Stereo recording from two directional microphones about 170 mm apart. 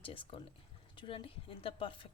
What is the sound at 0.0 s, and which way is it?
Speech, 30° left (ahead or behind).